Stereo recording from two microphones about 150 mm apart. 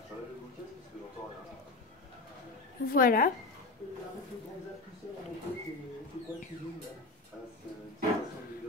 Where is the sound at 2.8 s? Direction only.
75° left (ahead or behind).